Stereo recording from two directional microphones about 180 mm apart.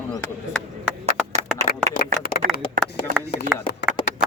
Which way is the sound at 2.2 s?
55° left (ahead or behind).